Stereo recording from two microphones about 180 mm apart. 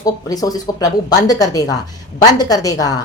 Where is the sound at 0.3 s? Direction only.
20° left (ahead or behind).